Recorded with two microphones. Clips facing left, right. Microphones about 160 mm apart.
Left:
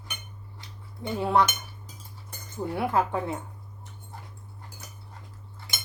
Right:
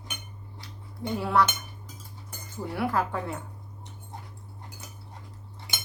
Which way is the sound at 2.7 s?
20° left (ahead or behind).